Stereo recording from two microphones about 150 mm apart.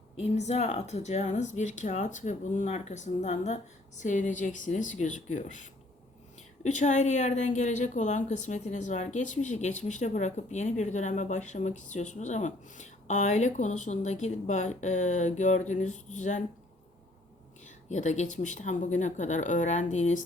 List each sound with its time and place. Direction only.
0.2 s speech: 45° left (ahead or behind)
17.7 s speech: 55° left (ahead or behind)